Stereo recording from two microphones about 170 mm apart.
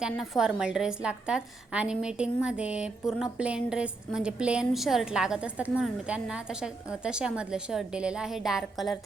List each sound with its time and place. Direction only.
0.0 s a woman's voice: 5° right (ahead or behind)